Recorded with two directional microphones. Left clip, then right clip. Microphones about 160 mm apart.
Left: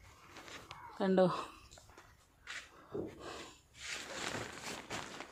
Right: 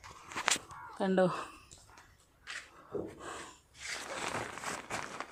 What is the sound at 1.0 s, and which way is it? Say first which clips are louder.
Speech: right 1 dB; centre (ahead or behind).